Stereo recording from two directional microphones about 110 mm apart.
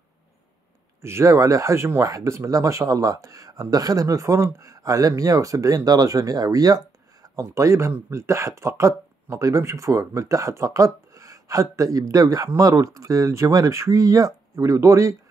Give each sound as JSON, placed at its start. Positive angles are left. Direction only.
{"t": 1.0, "sound": "speech", "side_deg": -25}